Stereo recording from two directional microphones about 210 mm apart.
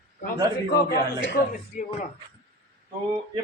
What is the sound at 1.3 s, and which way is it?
Speech, 40° left (ahead or behind).